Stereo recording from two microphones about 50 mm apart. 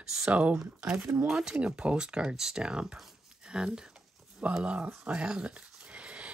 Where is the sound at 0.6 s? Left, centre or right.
Centre.